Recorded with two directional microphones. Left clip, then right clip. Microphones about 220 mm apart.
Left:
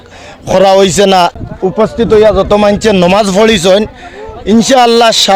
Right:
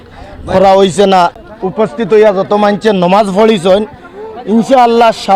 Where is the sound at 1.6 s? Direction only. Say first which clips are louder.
Left 3 dB; 40° left (ahead or behind).